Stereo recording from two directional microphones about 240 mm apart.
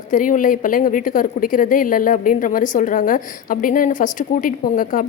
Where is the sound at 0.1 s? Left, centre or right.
Left.